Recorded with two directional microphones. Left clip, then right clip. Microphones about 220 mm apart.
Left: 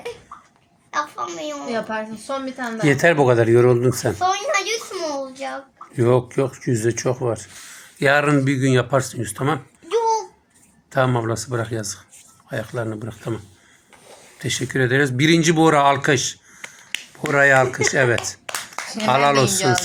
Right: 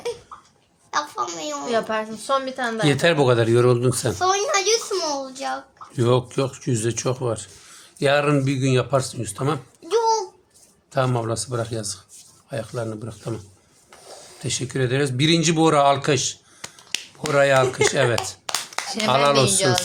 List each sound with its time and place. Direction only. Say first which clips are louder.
0.9 s a woman's voice: even; 25° right (ahead or behind)
4.2 s a woman's voice: right 1 dB; 25° right (ahead or behind)
6.0 s speech: left 3 dB; 10° right (ahead or behind)
7.9 s speech: left 2 dB; 5° left (ahead or behind)
10.9 s speech: left 3 dB; 10° left (ahead or behind)
14.4 s speech: left 4 dB; 15° left (ahead or behind)
18.2 s a sound: right 1 dB; 20° right (ahead or behind)
19.0 s speech: left 1 dB; centre (ahead or behind)